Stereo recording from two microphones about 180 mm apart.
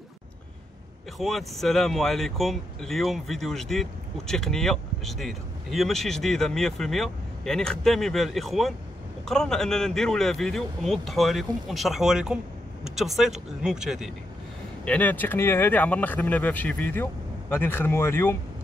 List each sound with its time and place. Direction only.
1.1 s speech: centre (ahead or behind)
14.9 s speech: 10° left (ahead or behind)